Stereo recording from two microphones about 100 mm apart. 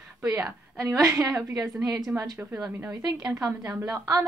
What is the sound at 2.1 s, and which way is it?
Speech, 15° right (ahead or behind).